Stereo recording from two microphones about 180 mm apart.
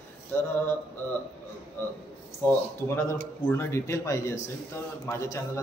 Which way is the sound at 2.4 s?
10° left (ahead or behind).